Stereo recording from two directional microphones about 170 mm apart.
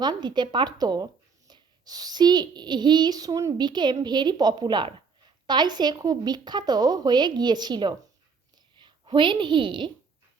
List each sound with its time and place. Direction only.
0.0 s a woman's voice: 25° right (ahead or behind)